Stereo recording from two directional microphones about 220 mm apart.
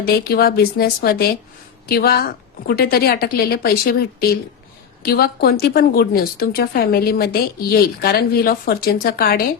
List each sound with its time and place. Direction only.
0.0 s speech: 45° left (ahead or behind)